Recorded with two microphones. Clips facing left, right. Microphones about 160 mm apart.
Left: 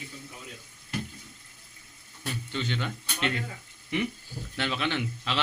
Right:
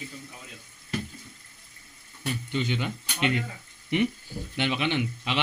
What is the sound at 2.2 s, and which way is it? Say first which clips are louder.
Speech: right 4 dB; 10° right (ahead or behind).